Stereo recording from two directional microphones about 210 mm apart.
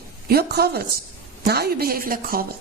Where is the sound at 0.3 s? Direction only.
45° right (ahead or behind).